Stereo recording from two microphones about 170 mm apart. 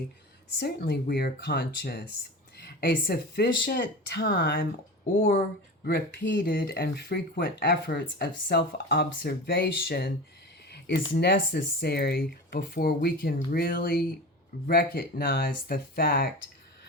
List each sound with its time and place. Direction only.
0.6 s speech: 65° left (ahead or behind)
5.8 s speech: 60° left (ahead or behind)
10.7 s a sound: 75° left (ahead or behind)
11.1 s speech: 80° left